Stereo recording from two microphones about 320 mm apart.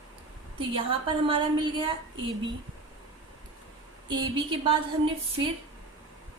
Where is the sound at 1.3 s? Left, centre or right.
Centre.